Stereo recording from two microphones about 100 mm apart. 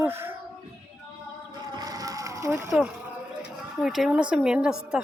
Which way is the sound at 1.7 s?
40° right (ahead or behind).